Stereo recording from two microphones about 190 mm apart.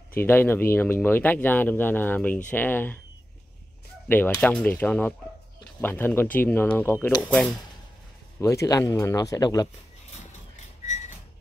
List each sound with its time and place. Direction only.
0.2 s speech: 10° left (ahead or behind)
4.1 s speech: 10° left (ahead or behind)
8.4 s speech: 15° left (ahead or behind)
10.8 s a sound: 40° left (ahead or behind)